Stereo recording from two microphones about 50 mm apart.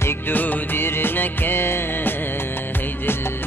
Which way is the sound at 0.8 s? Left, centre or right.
Left.